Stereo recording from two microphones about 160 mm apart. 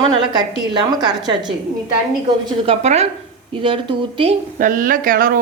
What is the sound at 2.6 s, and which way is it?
Speech, 40° right (ahead or behind).